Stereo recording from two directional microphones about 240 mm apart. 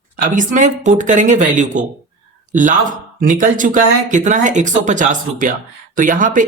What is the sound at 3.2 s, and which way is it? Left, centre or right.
Speech, right.